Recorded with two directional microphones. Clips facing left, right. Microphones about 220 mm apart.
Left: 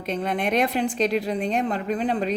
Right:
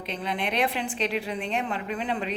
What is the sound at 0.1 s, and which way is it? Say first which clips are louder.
A woman's voice: left 6 dB; 45° left (ahead or behind).